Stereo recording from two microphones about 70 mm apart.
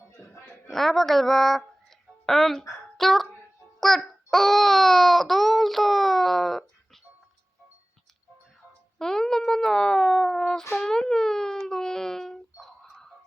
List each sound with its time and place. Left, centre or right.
0.1 s a sound: left
0.7 s a child's voice: centre
9.0 s speech: centre